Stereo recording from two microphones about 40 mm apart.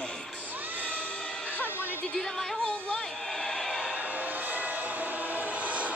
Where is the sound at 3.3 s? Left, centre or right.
Centre.